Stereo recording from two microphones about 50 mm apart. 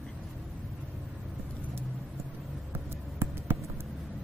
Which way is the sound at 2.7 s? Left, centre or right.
Right.